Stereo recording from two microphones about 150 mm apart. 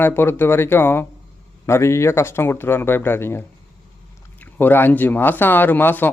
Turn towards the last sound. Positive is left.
turn(degrees=10)  # may be behind; listen again after turning